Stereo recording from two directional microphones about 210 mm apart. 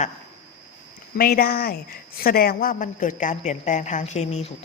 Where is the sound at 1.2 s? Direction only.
45° left (ahead or behind).